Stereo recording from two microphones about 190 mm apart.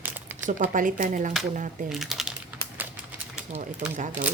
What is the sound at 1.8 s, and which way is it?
Speech, centre (ahead or behind).